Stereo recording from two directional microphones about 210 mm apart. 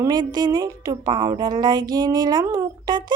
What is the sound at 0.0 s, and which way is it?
A woman's voice, 20° right (ahead or behind).